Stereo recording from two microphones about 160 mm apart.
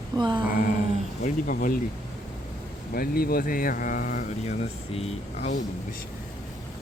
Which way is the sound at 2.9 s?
70° left (ahead or behind).